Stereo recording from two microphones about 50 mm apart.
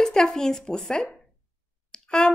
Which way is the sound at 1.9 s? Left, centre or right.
Centre.